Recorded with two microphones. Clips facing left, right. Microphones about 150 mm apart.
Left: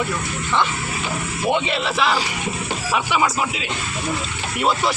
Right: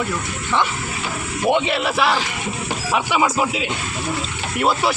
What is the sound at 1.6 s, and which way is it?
Speech, 10° right (ahead or behind).